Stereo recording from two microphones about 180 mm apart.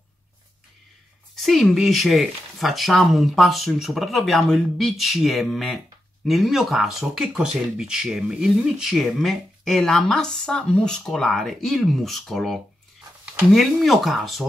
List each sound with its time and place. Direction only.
1.4 s speech: centre (ahead or behind)